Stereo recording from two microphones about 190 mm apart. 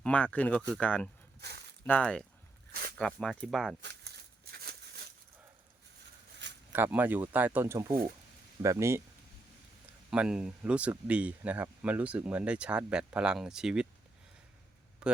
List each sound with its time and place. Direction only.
0.0 s speech: 5° left (ahead or behind)
3.8 s a sound: 60° right (ahead or behind)
6.4 s a sound: 70° right (ahead or behind)
6.7 s speech: 10° right (ahead or behind)
10.1 s speech: 5° right (ahead or behind)
15.0 s speech: 5° right (ahead or behind)